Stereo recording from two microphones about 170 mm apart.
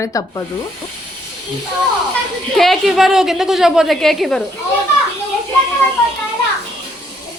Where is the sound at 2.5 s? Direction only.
Centre (ahead or behind).